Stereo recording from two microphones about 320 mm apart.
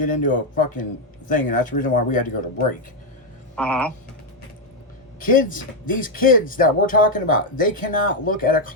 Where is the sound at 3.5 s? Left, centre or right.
Centre.